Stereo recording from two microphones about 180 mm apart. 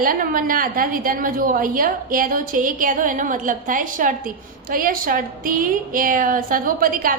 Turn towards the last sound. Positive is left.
turn(degrees=-50)  # may be behind; listen again after turning